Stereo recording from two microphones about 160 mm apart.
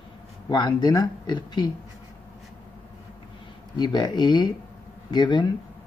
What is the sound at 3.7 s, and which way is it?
Speech, 25° left (ahead or behind).